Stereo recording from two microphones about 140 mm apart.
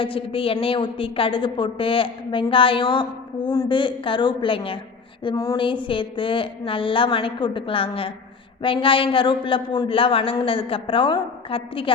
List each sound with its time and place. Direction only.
0.0 s a woman's voice: 40° left (ahead or behind)
5.2 s a woman's voice: 30° left (ahead or behind)